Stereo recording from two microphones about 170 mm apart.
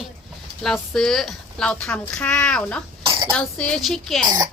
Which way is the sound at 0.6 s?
5° left (ahead or behind).